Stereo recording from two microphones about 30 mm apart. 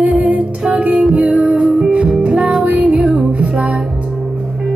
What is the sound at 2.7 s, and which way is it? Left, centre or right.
Music, right.